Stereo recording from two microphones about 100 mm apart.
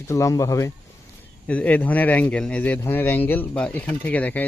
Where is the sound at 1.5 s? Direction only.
15° left (ahead or behind).